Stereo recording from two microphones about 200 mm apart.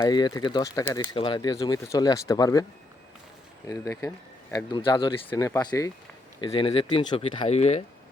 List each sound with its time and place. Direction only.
0.0 s speech: 20° left (ahead or behind)
3.7 s speech: 15° left (ahead or behind)
5.3 s speech: 15° left (ahead or behind); by 7.9 s 35° left (ahead or behind)